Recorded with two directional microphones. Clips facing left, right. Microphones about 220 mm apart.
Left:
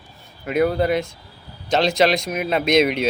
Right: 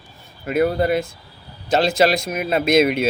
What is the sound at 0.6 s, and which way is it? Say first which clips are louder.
Speech: even; 45° right (ahead or behind).